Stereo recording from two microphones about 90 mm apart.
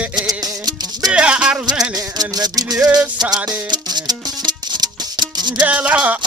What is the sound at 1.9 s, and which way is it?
Rattle, 50° right (ahead or behind).